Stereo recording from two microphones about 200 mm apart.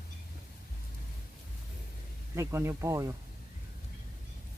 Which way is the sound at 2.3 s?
15° right (ahead or behind).